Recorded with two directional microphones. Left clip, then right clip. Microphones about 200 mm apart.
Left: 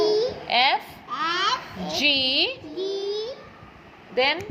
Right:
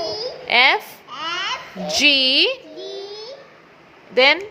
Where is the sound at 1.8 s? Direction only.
35° right (ahead or behind).